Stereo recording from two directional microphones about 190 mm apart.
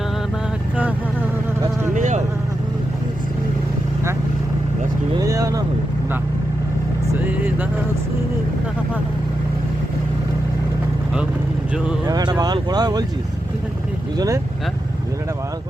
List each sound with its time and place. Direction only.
1.9 s vehicle: 40° right (ahead or behind)
5.1 s vehicle: 15° right (ahead or behind)
12.0 s vehicle: 20° right (ahead or behind)
14.2 s vehicle: 15° right (ahead or behind)